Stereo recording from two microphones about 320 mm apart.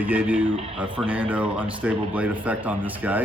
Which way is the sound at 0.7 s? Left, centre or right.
Centre.